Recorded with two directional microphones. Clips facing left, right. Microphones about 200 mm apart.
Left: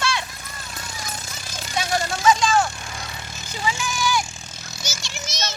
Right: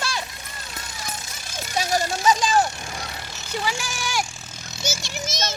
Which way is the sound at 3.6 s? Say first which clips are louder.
Left 5 dB; 75° right (ahead or behind).